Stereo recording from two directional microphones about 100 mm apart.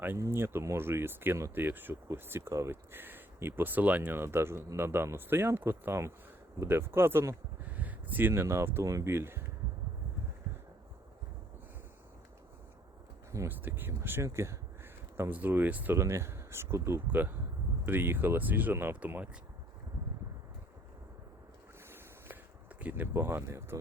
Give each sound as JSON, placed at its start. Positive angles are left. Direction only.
{"t": 0.2, "sound": "speech", "side_deg": -25}
{"t": 8.3, "sound": "speech", "side_deg": -30}
{"t": 10.5, "sound": "a sound", "side_deg": -25}
{"t": 13.5, "sound": "speech", "side_deg": -20}
{"t": 21.8, "sound": "boat", "side_deg": -25}
{"t": 22.8, "sound": "speech", "side_deg": -20}